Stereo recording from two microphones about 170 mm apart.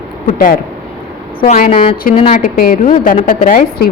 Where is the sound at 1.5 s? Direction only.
55° left (ahead or behind).